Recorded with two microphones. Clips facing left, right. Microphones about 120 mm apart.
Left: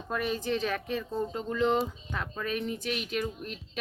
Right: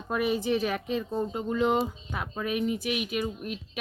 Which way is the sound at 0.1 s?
10° right (ahead or behind).